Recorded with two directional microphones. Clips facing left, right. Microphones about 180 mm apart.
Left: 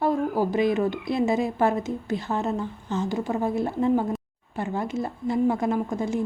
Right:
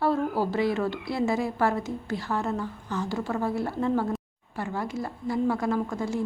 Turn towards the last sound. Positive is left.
turn(degrees=20)  # may be behind; listen again after turning